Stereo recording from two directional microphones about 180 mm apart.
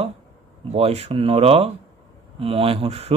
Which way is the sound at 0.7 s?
35° right (ahead or behind).